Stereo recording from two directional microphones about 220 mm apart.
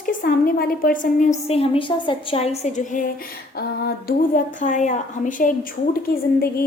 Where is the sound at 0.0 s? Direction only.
40° left (ahead or behind).